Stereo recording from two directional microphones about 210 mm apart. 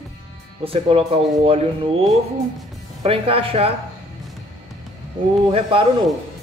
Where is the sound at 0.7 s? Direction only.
25° right (ahead or behind).